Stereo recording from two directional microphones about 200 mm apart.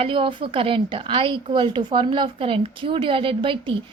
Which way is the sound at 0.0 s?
25° right (ahead or behind).